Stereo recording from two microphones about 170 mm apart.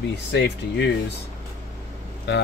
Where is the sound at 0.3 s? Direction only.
90° left.